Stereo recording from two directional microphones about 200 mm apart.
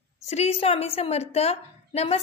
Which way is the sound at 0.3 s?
30° left (ahead or behind).